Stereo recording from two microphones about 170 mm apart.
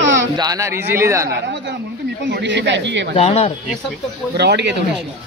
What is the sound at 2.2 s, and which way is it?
Speech, 85° right.